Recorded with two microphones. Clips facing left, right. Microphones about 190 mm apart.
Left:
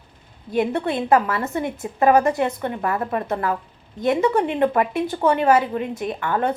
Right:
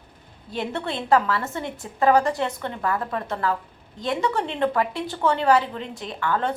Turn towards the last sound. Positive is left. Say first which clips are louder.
# left 3 dB
turn(degrees=20)  # may be behind; listen again after turning